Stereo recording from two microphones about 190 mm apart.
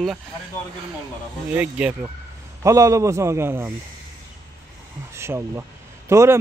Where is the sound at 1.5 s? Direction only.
10° right (ahead or behind).